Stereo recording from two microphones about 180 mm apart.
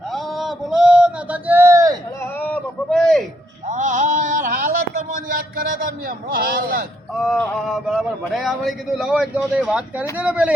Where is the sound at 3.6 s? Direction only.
45° right (ahead or behind).